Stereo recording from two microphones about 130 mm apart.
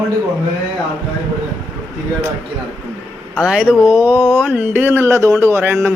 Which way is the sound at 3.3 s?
5° right (ahead or behind).